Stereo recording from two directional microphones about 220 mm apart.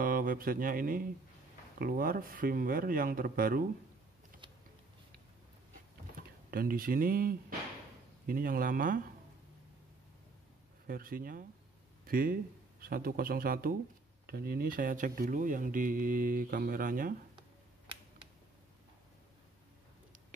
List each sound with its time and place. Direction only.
0.0 s speech: 40° right (ahead or behind)
6.1 s speech: 40° right (ahead or behind)
10.9 s speech: 40° right (ahead or behind)